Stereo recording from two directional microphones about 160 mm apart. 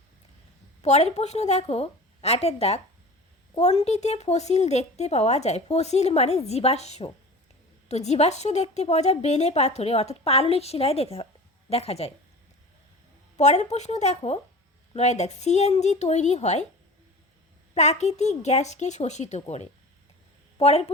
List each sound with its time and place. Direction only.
0.8 s a woman's voice: 45° left (ahead or behind)
3.8 s a woman's voice: 45° left (ahead or behind)
13.3 s a woman's voice: 45° left (ahead or behind)
17.7 s a woman's voice: 45° left (ahead or behind)